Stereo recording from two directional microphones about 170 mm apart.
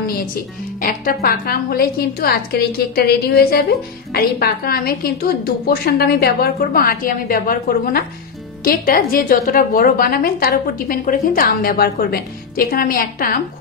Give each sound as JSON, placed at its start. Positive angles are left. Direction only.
{"t": 0.7, "sound": "a woman's voice", "side_deg": 55}